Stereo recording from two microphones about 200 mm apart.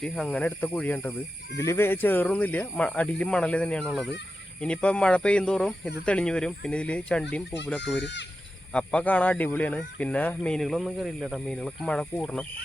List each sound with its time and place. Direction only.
0.0 s speech: 5° left (ahead or behind)
8.0 s speech: 60° left (ahead or behind)
8.7 s speech: 5° left (ahead or behind)